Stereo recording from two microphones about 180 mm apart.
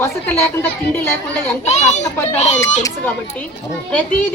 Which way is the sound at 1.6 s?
40° left (ahead or behind).